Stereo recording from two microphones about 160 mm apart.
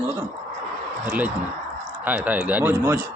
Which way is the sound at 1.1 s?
10° right (ahead or behind).